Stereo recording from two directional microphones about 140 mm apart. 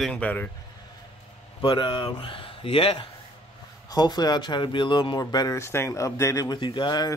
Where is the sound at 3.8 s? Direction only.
30° left (ahead or behind).